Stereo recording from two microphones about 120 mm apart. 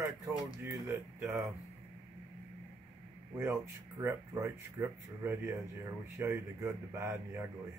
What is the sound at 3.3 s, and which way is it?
Speech, 20° right (ahead or behind).